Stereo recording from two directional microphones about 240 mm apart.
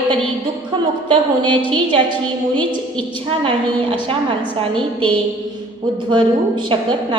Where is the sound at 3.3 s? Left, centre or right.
Right.